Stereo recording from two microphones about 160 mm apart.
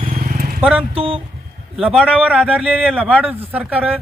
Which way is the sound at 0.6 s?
10° right (ahead or behind).